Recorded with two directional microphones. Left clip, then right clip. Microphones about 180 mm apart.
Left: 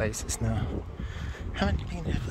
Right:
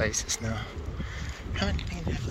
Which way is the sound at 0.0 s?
15° left (ahead or behind).